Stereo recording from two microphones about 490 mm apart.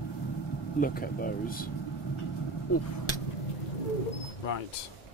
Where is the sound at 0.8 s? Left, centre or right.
Centre.